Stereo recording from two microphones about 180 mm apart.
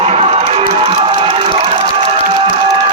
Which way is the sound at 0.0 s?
35° right (ahead or behind).